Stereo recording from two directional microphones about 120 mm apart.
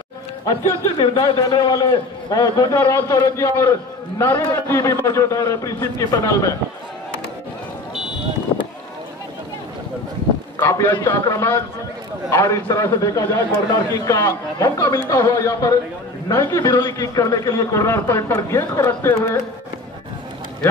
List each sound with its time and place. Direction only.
0.5 s a man's voice: 25° left (ahead or behind)
8.5 s run: 45° left (ahead or behind)
10.6 s a sound: 25° left (ahead or behind)
11.1 s a man's voice: 25° left (ahead or behind)